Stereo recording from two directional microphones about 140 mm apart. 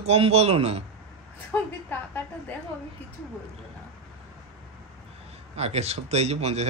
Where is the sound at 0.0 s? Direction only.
45° right (ahead or behind).